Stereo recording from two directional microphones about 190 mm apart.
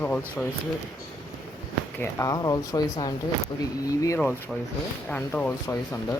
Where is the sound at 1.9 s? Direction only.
15° left (ahead or behind).